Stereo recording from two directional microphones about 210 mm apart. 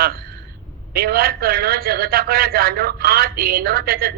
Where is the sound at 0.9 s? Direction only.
45° right (ahead or behind).